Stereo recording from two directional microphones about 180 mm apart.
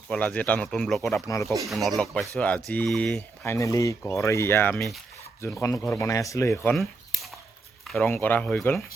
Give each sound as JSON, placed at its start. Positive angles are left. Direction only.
{"t": 0.1, "sound": "speech", "side_deg": 5}
{"t": 3.4, "sound": "speech", "side_deg": 15}
{"t": 6.7, "sound": "a sound", "side_deg": 0}
{"t": 7.9, "sound": "speech", "side_deg": 5}